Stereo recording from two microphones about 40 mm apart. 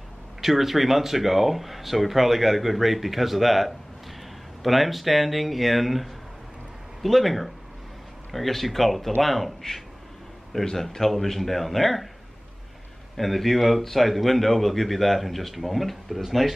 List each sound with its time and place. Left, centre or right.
0.4 s speech: centre
13.1 s speech: centre